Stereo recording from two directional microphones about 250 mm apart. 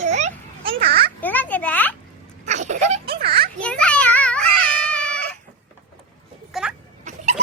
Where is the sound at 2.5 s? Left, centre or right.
Right.